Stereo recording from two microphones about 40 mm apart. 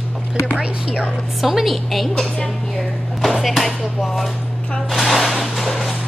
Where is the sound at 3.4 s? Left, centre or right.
Centre.